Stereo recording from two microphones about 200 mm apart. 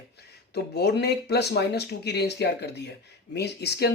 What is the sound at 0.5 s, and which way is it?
Speech, 55° left (ahead or behind).